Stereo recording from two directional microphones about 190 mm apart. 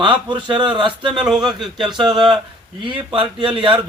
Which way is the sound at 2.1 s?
25° right (ahead or behind).